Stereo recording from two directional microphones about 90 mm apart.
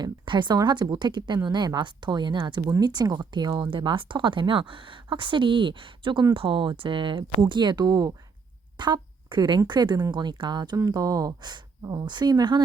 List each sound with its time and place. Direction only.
0.0 s speech: 60° right (ahead or behind)
3.6 s speech: 65° right (ahead or behind); by 12.6 s 50° right (ahead or behind)